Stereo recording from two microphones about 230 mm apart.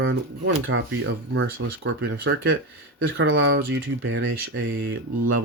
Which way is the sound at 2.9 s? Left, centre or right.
Right.